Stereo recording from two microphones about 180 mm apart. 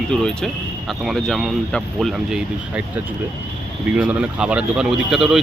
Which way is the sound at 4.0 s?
5° right (ahead or behind).